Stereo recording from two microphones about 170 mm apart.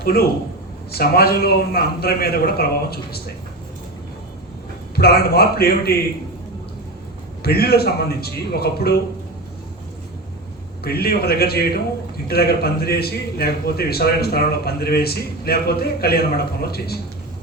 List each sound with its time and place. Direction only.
0.0 s a man's voice: 65° left (ahead or behind)
4.9 s a man's voice: 65° left (ahead or behind)
7.4 s a man's voice: 65° left (ahead or behind)
10.8 s a man's voice: 65° left (ahead or behind)